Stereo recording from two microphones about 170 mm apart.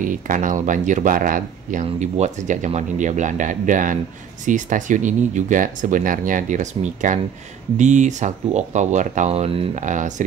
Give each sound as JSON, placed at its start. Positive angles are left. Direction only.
{"t": 0.0, "sound": "speech", "side_deg": -50}
{"t": 9.8, "sound": "speech", "side_deg": -45}